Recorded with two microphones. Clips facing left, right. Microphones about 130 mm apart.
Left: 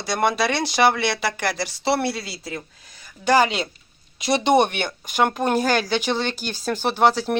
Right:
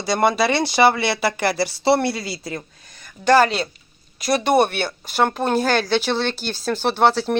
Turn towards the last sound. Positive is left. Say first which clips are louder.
# right 1 dB
turn(degrees=10)  # may be behind; listen again after turning